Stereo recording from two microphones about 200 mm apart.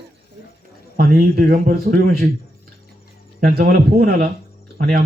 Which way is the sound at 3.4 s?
50° right (ahead or behind).